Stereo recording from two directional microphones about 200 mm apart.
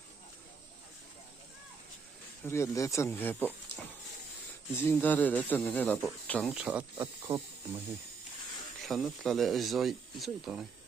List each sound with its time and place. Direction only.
2.4 s speech: 15° left (ahead or behind)
3.7 s pig: 60° left (ahead or behind)
4.7 s speech: 10° left (ahead or behind)
6.5 s speech: 5° right (ahead or behind)
8.8 s speech: centre (ahead or behind)